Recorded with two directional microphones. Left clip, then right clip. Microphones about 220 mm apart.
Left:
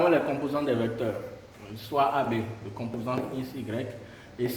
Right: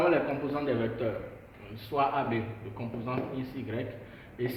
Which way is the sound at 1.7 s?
60° left (ahead or behind).